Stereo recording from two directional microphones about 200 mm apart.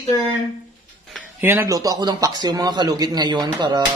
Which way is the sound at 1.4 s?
10° right (ahead or behind).